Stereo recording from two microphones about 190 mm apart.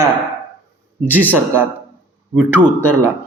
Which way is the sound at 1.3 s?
10° right (ahead or behind).